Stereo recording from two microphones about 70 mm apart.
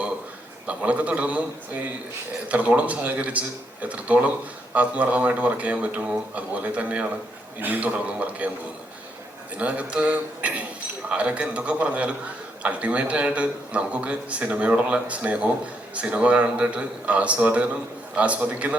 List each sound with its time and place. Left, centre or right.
0.7 s a man's voice: centre
9.6 s a man's voice: centre